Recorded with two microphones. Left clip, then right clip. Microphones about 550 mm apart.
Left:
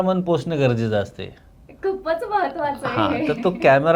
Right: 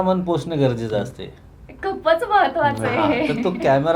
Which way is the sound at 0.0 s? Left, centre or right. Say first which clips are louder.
Even; left.